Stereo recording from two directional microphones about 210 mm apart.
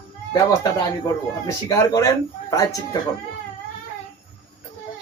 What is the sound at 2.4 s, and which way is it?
Speech, 15° left (ahead or behind).